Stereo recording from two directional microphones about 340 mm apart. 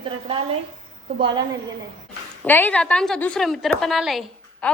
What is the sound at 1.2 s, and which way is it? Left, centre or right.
Speech, centre.